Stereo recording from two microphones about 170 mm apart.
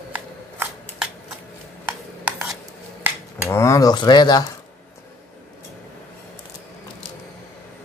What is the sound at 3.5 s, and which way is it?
Speech, 15° left (ahead or behind).